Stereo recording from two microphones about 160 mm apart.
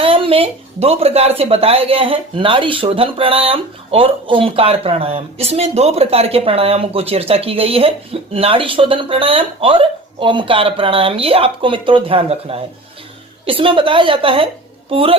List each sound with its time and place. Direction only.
0.0 s a woman's voice: 35° right (ahead or behind)